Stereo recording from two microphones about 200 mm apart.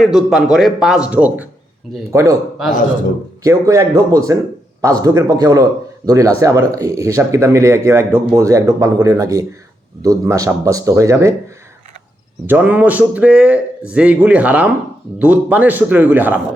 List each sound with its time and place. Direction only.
0.0 s speech: centre (ahead or behind)
3.4 s speech: 15° right (ahead or behind)
12.5 s speech: 10° right (ahead or behind)